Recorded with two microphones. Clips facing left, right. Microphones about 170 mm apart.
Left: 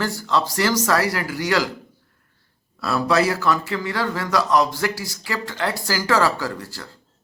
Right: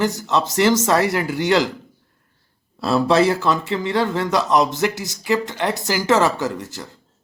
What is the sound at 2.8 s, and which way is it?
Speech, 25° right (ahead or behind).